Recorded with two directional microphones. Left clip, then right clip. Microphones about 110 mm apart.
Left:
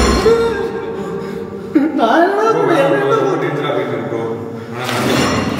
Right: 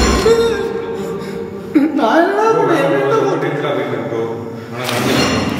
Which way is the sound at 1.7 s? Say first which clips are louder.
Even; 5° right (ahead or behind).